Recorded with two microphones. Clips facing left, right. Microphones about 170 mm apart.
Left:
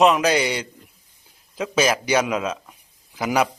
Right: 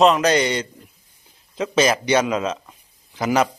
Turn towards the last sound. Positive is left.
turn(degrees=10)  # may be behind; listen again after turning